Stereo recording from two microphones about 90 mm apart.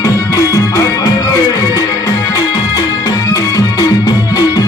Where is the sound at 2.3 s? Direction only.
45° left (ahead or behind).